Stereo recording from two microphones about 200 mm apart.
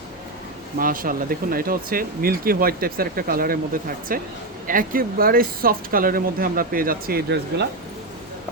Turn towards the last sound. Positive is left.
turn(degrees=-55)  # may be behind; listen again after turning